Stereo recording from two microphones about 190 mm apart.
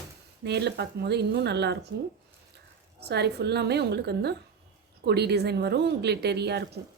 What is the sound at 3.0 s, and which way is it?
Speech, 60° right (ahead or behind).